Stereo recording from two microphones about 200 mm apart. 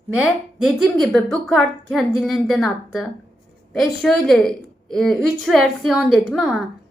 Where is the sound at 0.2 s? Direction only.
Centre (ahead or behind).